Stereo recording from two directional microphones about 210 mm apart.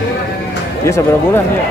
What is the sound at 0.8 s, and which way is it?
Speech, 15° left (ahead or behind).